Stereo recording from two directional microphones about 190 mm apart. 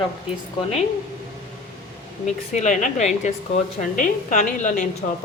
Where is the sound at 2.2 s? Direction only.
40° left (ahead or behind).